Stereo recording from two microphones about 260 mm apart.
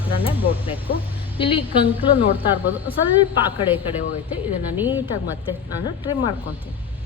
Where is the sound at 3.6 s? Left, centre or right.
Centre.